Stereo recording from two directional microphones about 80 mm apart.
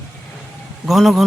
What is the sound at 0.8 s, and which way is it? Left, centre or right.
Speech, centre.